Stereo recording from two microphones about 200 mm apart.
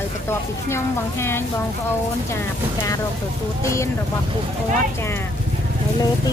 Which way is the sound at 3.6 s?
15° left (ahead or behind).